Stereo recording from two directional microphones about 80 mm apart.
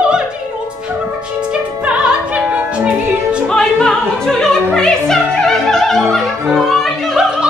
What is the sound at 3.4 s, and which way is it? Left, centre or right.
Opera, centre.